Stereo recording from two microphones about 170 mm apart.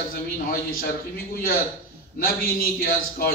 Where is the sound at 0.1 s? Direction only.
60° left (ahead or behind).